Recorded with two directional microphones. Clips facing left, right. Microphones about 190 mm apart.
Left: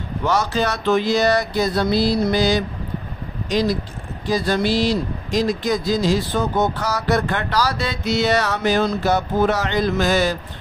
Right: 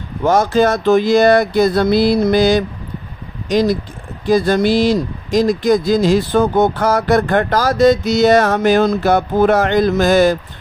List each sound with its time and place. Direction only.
0.2 s speech: 50° right (ahead or behind)